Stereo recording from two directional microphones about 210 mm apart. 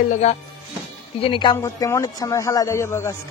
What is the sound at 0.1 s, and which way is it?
A man's voice, 30° left (ahead or behind).